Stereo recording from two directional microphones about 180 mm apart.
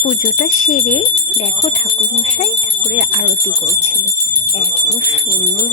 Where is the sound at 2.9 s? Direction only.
40° left (ahead or behind).